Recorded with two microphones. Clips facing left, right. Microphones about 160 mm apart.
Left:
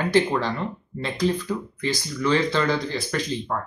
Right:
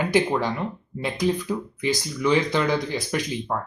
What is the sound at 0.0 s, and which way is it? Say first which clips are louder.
Speech: even; 10° right (ahead or behind).